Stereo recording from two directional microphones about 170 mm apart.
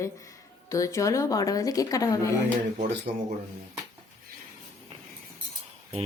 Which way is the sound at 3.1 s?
40° right (ahead or behind).